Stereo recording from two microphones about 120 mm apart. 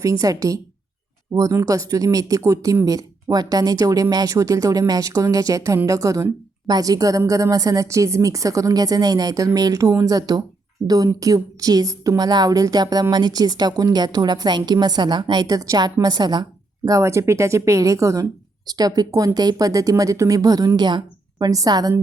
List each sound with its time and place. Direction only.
0.0 s speech: 30° right (ahead or behind)